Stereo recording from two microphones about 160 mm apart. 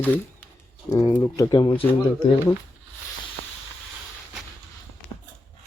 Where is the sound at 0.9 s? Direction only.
20° left (ahead or behind).